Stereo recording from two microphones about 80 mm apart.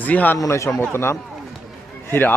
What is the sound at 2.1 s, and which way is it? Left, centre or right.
Speech, left.